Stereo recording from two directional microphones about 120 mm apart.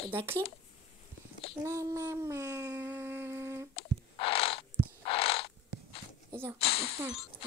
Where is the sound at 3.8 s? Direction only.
50° left (ahead or behind).